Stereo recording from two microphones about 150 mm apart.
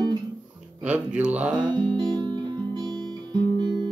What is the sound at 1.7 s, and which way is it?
Guitar, 30° right (ahead or behind).